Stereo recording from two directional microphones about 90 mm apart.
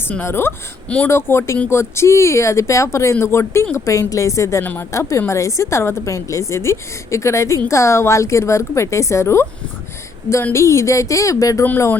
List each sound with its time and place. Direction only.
0.1 s speech: 25° left (ahead or behind)
4.6 s speech: 20° left (ahead or behind)
4.9 s speech: 35° left (ahead or behind)
10.5 s speech: 35° left (ahead or behind)